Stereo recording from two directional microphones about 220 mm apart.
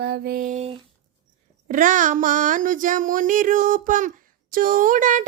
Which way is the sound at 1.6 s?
35° right (ahead or behind).